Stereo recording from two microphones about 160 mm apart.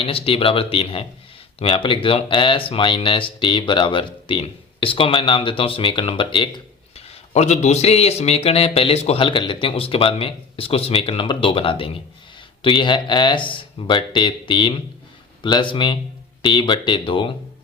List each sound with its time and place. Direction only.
0.0 s speech: 35° left (ahead or behind)